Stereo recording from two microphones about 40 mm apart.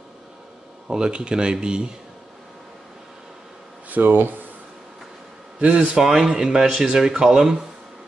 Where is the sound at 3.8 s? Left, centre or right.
Right.